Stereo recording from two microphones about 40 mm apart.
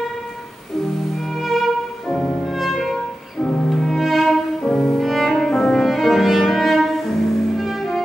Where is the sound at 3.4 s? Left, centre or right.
Left.